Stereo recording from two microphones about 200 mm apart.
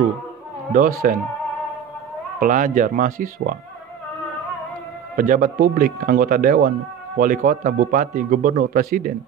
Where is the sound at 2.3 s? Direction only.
40° right (ahead or behind).